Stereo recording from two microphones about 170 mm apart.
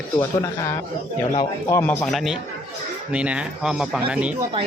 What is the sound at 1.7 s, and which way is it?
Speech, 15° left (ahead or behind).